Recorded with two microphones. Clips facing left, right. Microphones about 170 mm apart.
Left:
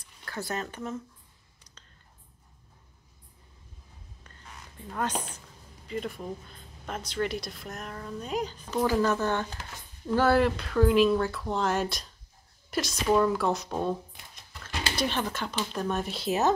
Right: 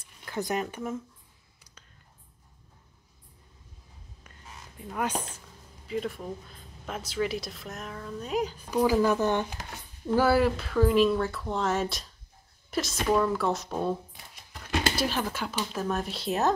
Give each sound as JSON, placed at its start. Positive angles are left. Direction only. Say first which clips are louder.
{"t": 0.2, "sound": "speech", "louder": "right 4 dB", "side_deg": -15}
{"t": 4.9, "sound": "speech", "louder": "right 1 dB", "side_deg": -10}